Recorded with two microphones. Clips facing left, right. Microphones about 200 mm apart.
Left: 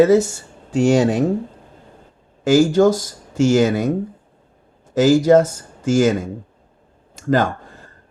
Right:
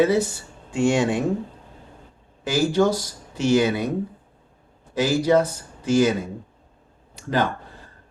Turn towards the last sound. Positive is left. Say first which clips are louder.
# left 6 dB
turn(degrees=45)  # may be behind; listen again after turning